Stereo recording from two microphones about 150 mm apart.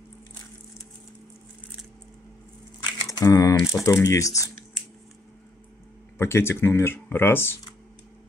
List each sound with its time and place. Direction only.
2.8 s a sound: 25° left (ahead or behind)
3.8 s speech: 20° left (ahead or behind)
6.1 s speech: 15° left (ahead or behind)